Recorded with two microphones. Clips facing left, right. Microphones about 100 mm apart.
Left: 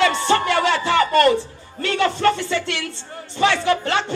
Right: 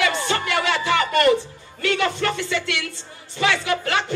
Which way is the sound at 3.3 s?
30° left (ahead or behind).